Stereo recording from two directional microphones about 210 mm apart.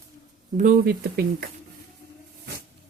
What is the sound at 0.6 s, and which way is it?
Speech, 45° right (ahead or behind).